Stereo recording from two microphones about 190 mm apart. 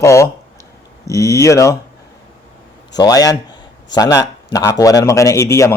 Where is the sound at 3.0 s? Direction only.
20° left (ahead or behind).